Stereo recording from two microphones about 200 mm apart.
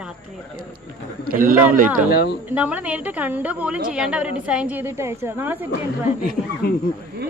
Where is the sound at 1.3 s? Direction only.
45° right (ahead or behind).